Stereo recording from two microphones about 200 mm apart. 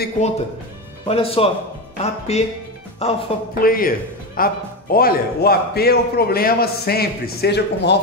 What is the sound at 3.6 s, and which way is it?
A man's voice, 45° left (ahead or behind).